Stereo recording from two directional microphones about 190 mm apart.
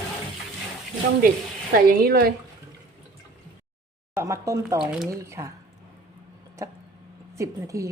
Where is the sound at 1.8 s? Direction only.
55° right (ahead or behind).